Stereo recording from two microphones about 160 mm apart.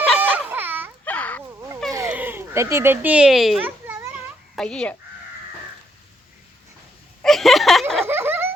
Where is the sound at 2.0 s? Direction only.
10° right (ahead or behind).